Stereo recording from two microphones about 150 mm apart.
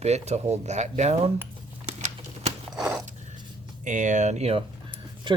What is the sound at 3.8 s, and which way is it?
Speech, 60° right (ahead or behind).